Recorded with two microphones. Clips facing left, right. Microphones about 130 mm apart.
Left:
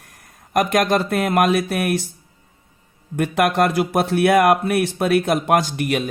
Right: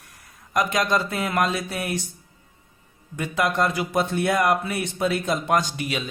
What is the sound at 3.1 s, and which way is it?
Speech, 60° left (ahead or behind).